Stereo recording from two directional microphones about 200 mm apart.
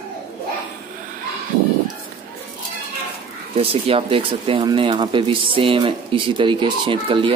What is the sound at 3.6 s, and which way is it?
Speech, 30° right (ahead or behind).